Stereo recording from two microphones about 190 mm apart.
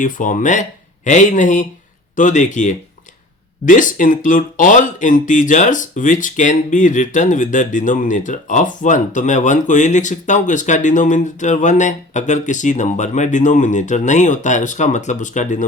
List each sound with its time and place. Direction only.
0.0 s speech: 45° left (ahead or behind)